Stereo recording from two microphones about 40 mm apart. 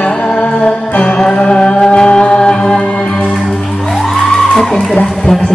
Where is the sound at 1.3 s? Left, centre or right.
Left.